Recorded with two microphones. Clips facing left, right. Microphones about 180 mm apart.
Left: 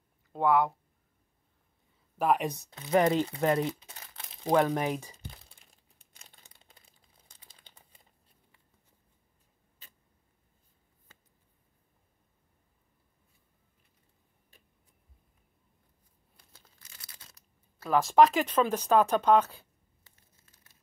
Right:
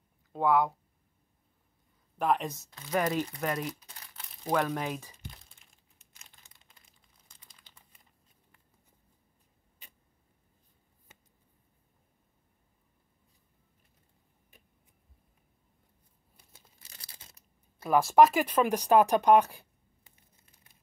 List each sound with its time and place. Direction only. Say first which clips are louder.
0.3 s speech: left 1 dB; centre (ahead or behind)
2.1 s speech: left 2 dB; 10° left (ahead or behind)
2.7 s speech: left 5 dB; 25° left (ahead or behind)
6.1 s crumpling: left 2 dB; 30° left (ahead or behind)
16.8 s a sound: right 1 dB; 35° right (ahead or behind)
17.8 s speech: right 1 dB; 10° right (ahead or behind)